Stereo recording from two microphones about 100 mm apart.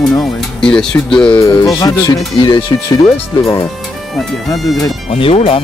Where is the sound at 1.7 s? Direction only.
35° left (ahead or behind).